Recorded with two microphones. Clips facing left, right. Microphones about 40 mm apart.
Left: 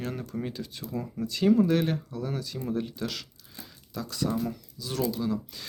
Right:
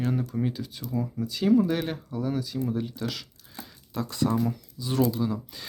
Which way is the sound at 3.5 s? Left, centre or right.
Right.